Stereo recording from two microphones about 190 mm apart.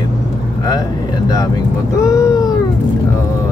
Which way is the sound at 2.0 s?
15° left (ahead or behind).